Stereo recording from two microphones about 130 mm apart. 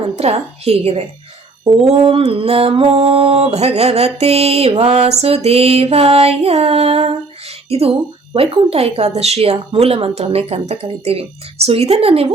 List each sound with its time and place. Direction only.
0.2 s speech: 55° right (ahead or behind)